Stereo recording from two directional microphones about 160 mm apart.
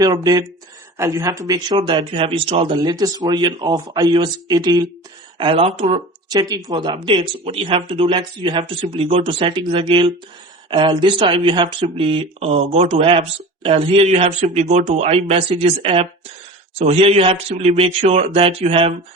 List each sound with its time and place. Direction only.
0.0 s speech: 25° right (ahead or behind)
5.4 s speech: 35° right (ahead or behind)
6.2 s speech: 25° right (ahead or behind)